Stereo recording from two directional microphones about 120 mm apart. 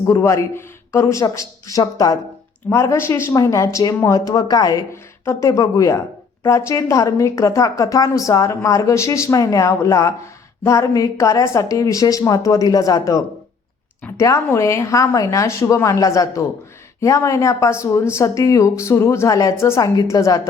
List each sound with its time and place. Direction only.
0.0 s a woman's voice: 25° left (ahead or behind)